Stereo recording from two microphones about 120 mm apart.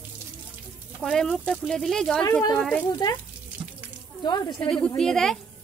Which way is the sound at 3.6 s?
20° right (ahead or behind).